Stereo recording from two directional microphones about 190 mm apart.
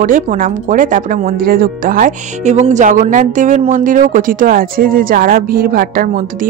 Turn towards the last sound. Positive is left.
turn(degrees=-50)  # may be behind; listen again after turning